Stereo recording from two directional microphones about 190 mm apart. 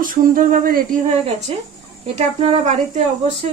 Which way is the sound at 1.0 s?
30° right (ahead or behind).